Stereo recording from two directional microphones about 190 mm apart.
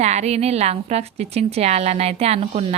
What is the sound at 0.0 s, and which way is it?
A woman's voice, 35° right (ahead or behind).